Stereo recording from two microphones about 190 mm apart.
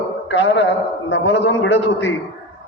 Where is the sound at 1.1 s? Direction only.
65° left (ahead or behind).